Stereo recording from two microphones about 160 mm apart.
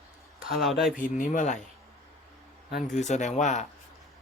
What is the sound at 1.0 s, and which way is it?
Speech, 55° left (ahead or behind).